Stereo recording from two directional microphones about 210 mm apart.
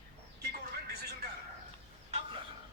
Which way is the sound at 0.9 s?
50° right (ahead or behind).